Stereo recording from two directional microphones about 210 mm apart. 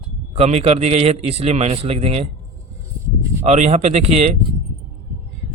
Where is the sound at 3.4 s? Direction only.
30° right (ahead or behind).